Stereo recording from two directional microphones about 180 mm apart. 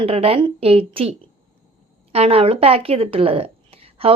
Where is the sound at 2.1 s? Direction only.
35° right (ahead or behind).